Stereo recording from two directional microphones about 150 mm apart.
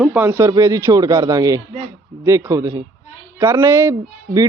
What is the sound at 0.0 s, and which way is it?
Speech, 10° right (ahead or behind).